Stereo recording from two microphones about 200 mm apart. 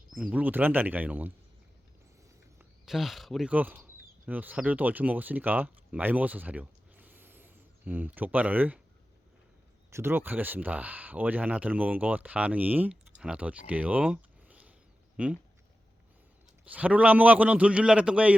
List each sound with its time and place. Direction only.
0.1 s speech: 5° right (ahead or behind)
2.6 s speech: centre (ahead or behind)
9.9 s speech: 10° right (ahead or behind)
16.7 s speech: 5° right (ahead or behind)